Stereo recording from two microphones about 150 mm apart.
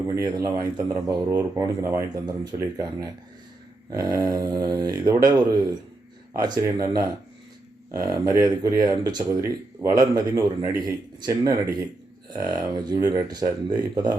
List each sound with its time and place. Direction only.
0.2 s speech: 20° right (ahead or behind)